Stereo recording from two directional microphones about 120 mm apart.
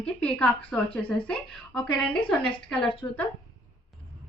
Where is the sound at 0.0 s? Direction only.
10° left (ahead or behind).